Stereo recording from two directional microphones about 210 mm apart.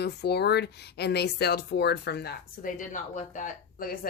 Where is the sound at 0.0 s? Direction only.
50° left (ahead or behind).